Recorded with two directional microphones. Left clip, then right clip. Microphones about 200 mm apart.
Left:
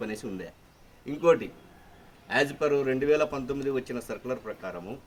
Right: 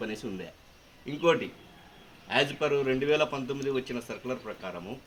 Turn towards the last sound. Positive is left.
turn(degrees=5)  # may be behind; listen again after turning